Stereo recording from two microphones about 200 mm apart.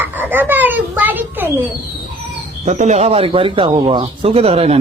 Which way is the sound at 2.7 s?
35° right (ahead or behind).